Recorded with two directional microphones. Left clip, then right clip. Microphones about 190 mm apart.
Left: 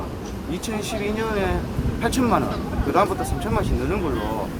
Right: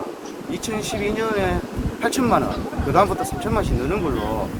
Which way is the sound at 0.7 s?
5° right (ahead or behind).